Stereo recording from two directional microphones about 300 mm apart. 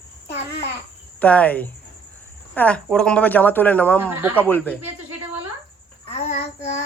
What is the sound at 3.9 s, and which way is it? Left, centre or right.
Speech, centre.